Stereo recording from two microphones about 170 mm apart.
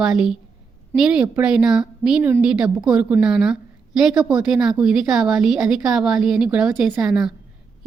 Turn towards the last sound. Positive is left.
turn(degrees=0)  # may be behind; listen again after turning